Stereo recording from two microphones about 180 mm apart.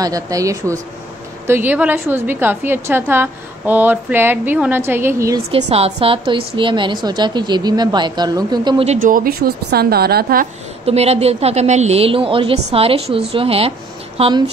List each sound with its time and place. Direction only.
0.0 s a woman's voice: 20° right (ahead or behind)
5.5 s a woman's voice: 35° right (ahead or behind)
9.0 s a woman's voice: 50° right (ahead or behind)
10.9 s a woman's voice: 35° right (ahead or behind)